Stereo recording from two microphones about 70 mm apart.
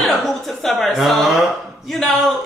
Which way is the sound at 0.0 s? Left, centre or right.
Centre.